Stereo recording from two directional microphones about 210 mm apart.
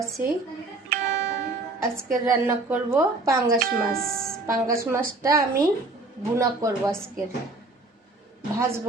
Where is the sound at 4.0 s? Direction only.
45° right (ahead or behind).